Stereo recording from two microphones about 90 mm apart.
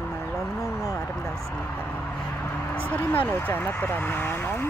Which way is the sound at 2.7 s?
15° left (ahead or behind).